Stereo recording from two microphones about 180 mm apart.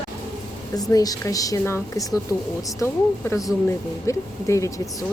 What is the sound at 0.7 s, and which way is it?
Speech, 20° left (ahead or behind).